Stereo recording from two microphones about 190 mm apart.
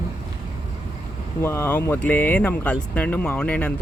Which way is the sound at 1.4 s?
15° left (ahead or behind).